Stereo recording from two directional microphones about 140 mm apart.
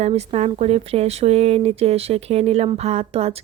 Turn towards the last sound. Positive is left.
turn(degrees=-45)  # may be behind; listen again after turning